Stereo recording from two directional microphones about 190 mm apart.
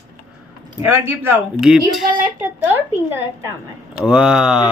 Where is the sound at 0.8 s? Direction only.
10° right (ahead or behind).